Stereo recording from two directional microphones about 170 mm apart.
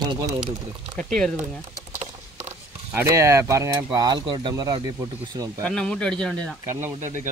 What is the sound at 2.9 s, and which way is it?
Speech, 15° right (ahead or behind).